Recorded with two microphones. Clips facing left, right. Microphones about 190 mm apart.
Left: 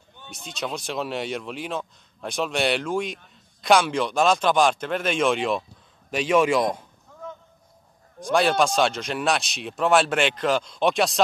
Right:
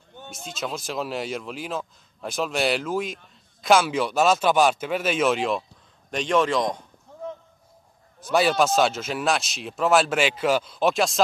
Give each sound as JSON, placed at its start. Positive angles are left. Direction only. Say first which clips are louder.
{"t": 0.3, "sound": "a man's voice", "louder": "even", "side_deg": 0}
{"t": 7.1, "sound": "a sound", "louder": "right 4 dB", "side_deg": -30}
{"t": 8.2, "sound": "speech", "louder": "even", "side_deg": -5}